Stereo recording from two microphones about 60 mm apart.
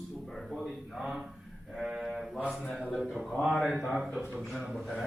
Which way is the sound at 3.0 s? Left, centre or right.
Centre.